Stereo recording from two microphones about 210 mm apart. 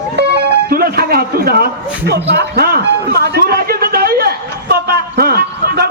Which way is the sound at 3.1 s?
50° right (ahead or behind).